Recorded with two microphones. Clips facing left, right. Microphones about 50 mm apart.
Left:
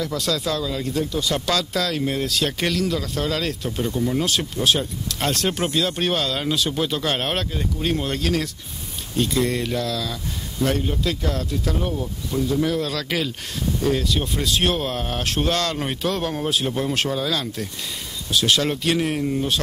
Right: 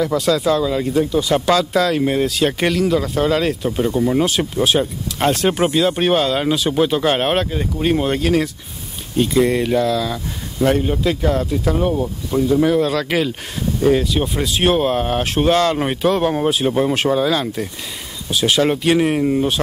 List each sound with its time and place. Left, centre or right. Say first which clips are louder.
0.0 s speech: right 8 dB; centre